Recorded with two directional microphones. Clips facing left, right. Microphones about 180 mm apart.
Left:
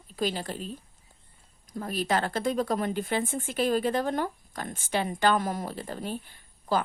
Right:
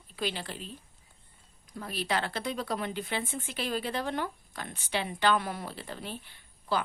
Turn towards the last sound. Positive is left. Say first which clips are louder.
# left 4 dB
turn(degrees=45)  # may be behind; listen again after turning